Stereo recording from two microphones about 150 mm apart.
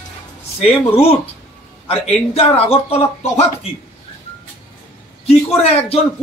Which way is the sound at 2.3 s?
40° left (ahead or behind).